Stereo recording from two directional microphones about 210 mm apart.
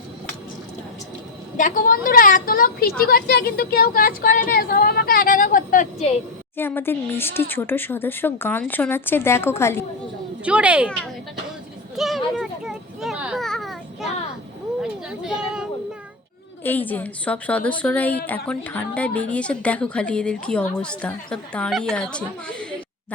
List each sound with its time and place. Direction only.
1.5 s a woman's voice: 40° left (ahead or behind)
6.6 s speech: 10° left (ahead or behind)
10.4 s a woman's voice: 5° right (ahead or behind)
11.9 s a sound: centre (ahead or behind)
14.8 s children playing: 5° right (ahead or behind)
16.6 s a woman's voice: 10° left (ahead or behind)